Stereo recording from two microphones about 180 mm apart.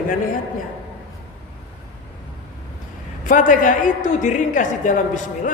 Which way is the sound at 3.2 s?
45° left (ahead or behind).